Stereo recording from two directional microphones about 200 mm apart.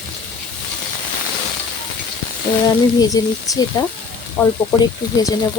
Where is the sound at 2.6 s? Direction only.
20° left (ahead or behind).